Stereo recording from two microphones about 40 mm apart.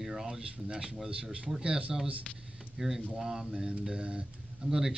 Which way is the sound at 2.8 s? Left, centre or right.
Centre.